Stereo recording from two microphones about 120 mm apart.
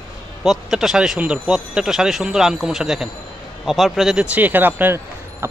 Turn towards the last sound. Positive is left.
turn(degrees=-20)  # may be behind; listen again after turning